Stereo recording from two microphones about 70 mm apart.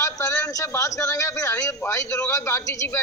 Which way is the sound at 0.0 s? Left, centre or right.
Left.